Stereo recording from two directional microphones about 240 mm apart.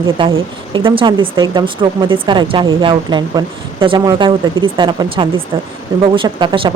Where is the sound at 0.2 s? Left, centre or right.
Right.